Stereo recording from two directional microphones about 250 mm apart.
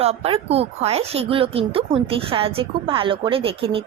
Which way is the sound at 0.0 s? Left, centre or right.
Right.